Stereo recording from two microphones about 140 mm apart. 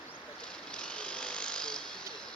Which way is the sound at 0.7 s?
5° left (ahead or behind).